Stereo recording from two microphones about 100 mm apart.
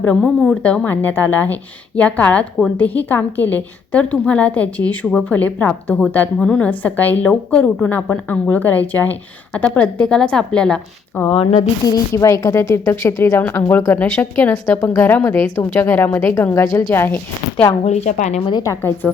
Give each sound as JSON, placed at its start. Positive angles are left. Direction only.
{"t": 0.0, "sound": "a woman's voice", "side_deg": 10}
{"t": 11.8, "sound": "a woman's voice", "side_deg": 40}
{"t": 17.8, "sound": "a woman's voice", "side_deg": 90}
{"t": 18.5, "sound": "speech", "side_deg": 35}
{"t": 19.0, "sound": "speech", "side_deg": 10}